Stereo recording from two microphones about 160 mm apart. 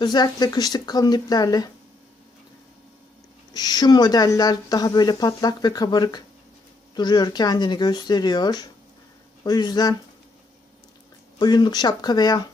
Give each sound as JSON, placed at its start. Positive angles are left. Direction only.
{"t": 0.0, "sound": "speech", "side_deg": 25}
{"t": 3.5, "sound": "speech", "side_deg": 25}
{"t": 11.3, "sound": "speech", "side_deg": 25}